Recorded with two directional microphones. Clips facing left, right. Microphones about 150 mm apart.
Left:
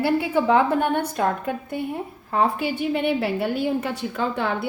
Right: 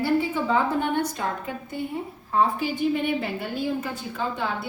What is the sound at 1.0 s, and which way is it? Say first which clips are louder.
Speech: left 3 dB; 60° left (ahead or behind).